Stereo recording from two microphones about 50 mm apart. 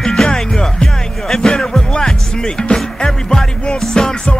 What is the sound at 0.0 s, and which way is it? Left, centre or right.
Music, centre.